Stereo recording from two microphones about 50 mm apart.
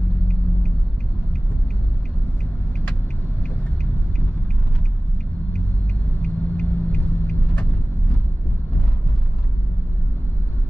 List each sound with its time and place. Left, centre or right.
6.2 s vehicle: centre